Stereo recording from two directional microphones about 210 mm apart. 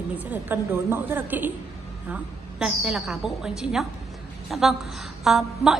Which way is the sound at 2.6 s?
5° right (ahead or behind).